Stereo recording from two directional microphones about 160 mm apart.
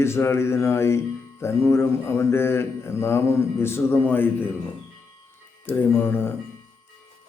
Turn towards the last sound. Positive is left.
turn(degrees=15)  # may be behind; listen again after turning